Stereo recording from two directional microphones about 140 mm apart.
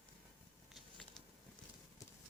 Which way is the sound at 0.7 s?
Centre (ahead or behind).